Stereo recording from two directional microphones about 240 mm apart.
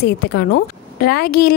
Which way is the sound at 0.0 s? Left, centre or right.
Left.